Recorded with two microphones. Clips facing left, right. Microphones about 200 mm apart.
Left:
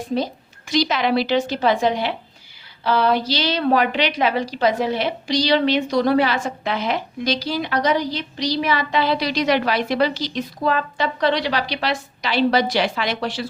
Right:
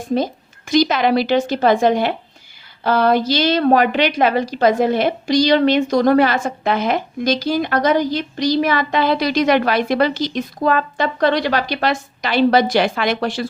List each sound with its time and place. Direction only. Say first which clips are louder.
0.7 s a woman's voice: right 4 dB; 50° right (ahead or behind)